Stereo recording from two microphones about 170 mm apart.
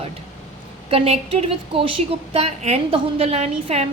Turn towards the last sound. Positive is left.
turn(degrees=-40)  # may be behind; listen again after turning